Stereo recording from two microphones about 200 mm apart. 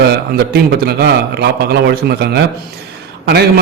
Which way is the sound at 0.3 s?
55° right (ahead or behind).